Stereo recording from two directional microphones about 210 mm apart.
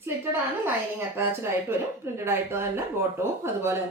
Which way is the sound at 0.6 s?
10° right (ahead or behind).